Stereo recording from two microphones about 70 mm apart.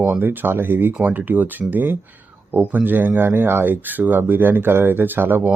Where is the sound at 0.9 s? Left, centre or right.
Right.